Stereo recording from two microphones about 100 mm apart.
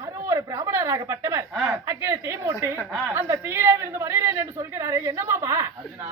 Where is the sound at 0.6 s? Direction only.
30° right (ahead or behind).